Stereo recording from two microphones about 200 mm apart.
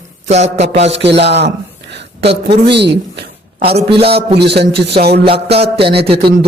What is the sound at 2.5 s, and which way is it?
Speech, 55° right (ahead or behind).